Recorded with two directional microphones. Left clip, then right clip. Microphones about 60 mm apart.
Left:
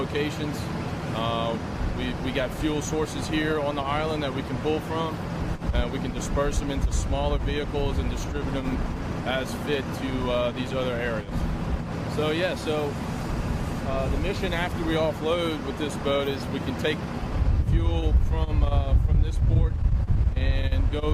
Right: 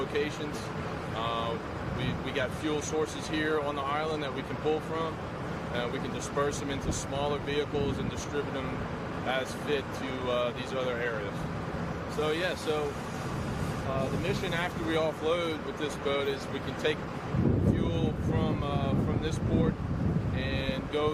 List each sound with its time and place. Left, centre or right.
1.2 s speech: left
6.3 s speech: left
9.2 s speech: left
12.1 s speech: left
14.3 s speech: left